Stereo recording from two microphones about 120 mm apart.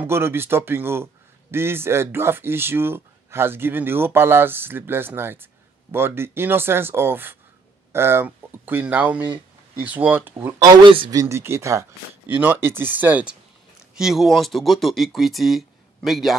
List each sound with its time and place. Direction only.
0.0 s speech: 20° right (ahead or behind)
10.6 s a man's voice: 35° right (ahead or behind)
11.1 s speech: 25° right (ahead or behind); by 16.3 s centre (ahead or behind)